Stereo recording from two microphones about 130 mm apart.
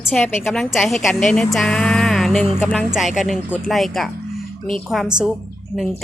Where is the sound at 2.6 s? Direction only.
15° left (ahead or behind).